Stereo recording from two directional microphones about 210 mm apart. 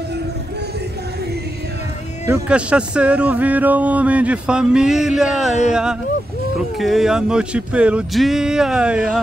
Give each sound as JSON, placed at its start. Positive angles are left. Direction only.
{"t": 2.2, "sound": "speech", "side_deg": -10}